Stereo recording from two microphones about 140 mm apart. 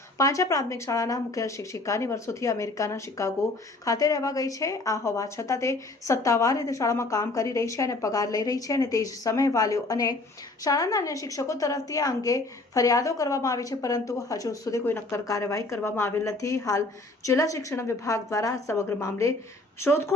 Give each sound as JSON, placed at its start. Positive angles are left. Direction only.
{"t": 0.2, "sound": "a woman's voice", "side_deg": 25}